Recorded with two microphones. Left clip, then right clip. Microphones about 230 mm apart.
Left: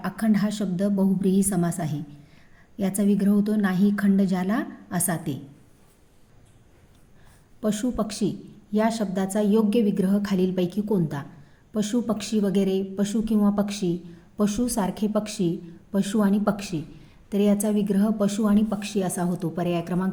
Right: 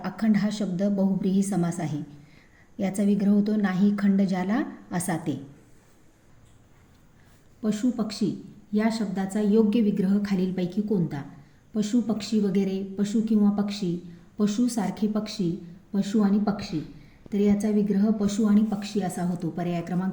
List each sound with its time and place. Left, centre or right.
0.0 s a woman's voice: left
7.6 s a woman's voice: left